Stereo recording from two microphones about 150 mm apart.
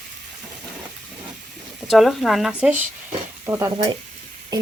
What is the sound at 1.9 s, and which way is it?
Speech, centre (ahead or behind).